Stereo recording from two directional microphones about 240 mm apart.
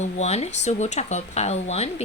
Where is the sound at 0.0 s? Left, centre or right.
Left.